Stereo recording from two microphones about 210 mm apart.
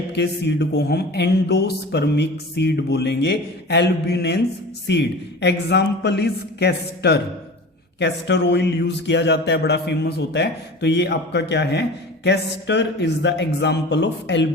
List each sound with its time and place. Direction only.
0.1 s speech: 55° left (ahead or behind)